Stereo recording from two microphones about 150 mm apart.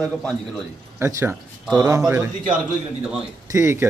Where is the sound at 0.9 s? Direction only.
15° right (ahead or behind).